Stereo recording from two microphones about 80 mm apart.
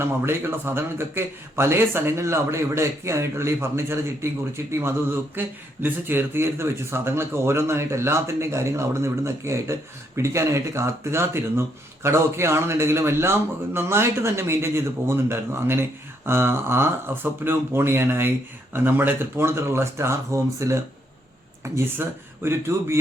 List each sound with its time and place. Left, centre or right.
0.0 s a man's voice: right